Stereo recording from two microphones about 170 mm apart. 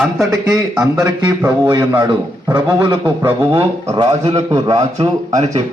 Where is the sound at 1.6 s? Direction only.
25° right (ahead or behind).